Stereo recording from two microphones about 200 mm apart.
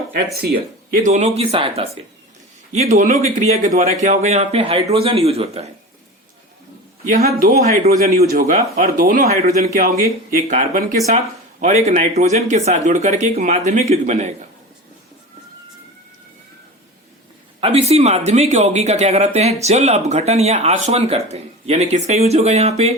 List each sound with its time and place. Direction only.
0.3 s speech: 50° right (ahead or behind); by 5.6 s 30° right (ahead or behind)
7.9 s speech: 50° right (ahead or behind)
17.6 s speech: 30° right (ahead or behind)